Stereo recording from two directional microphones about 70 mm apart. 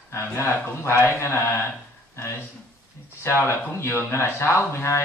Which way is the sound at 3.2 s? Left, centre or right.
Left.